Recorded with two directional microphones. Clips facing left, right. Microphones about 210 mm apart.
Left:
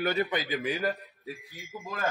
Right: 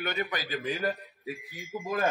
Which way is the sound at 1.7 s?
10° right (ahead or behind).